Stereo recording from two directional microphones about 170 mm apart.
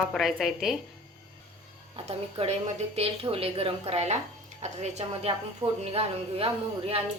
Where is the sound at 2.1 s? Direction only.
35° right (ahead or behind).